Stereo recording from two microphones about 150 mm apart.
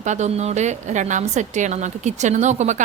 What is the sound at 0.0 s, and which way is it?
A woman's voice, 50° right (ahead or behind).